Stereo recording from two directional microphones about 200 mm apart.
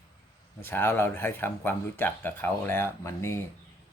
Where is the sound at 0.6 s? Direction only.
10° left (ahead or behind).